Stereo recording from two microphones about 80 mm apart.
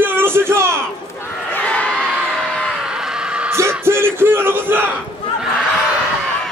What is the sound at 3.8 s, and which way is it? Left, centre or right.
Crowd, right.